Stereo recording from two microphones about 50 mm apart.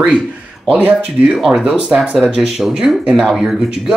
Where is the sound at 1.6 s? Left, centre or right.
Right.